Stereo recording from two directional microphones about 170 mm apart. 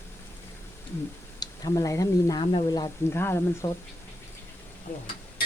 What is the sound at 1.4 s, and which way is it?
Speech, 20° left (ahead or behind).